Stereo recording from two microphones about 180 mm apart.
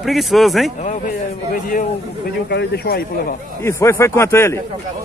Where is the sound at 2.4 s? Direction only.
65° left (ahead or behind).